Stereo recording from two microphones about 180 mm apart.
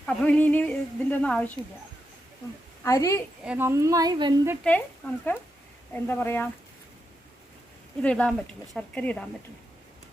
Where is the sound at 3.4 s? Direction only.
15° right (ahead or behind).